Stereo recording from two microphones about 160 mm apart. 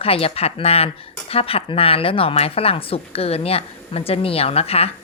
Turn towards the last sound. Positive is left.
turn(degrees=40)  # may be behind; listen again after turning